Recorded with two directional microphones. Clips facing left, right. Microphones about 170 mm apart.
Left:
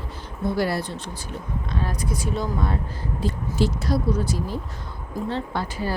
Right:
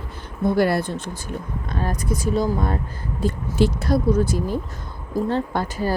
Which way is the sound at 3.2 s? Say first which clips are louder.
Right 4 dB; 55° right (ahead or behind).